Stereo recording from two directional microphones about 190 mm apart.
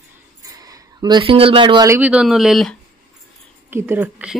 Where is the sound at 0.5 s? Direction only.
20° right (ahead or behind).